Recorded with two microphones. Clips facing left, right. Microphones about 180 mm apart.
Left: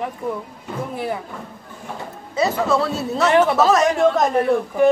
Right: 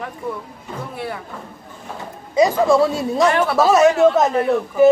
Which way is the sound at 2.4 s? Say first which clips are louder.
Right 5 dB; 15° right (ahead or behind).